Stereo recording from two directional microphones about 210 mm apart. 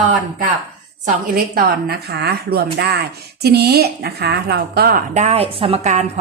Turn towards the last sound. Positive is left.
turn(degrees=-30)  # may be behind; listen again after turning